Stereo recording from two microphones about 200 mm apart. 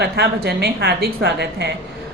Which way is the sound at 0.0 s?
55° right (ahead or behind).